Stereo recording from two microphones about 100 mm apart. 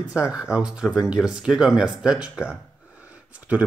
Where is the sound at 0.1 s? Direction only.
10° right (ahead or behind).